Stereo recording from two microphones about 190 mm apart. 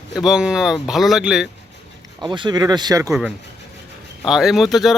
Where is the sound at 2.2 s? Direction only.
25° right (ahead or behind).